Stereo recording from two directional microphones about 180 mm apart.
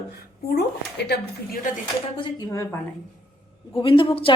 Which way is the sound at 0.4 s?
65° left (ahead or behind).